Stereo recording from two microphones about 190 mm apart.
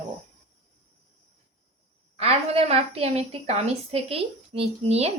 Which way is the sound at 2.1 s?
30° right (ahead or behind).